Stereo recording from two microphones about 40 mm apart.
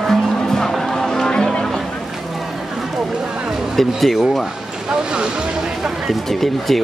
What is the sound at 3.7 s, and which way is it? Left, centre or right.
Speech, centre.